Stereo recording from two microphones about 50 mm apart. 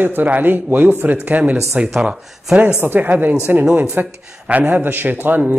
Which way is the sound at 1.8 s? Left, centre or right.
Right.